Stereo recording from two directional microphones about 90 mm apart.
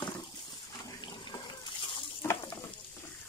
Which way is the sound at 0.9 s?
50° left (ahead or behind).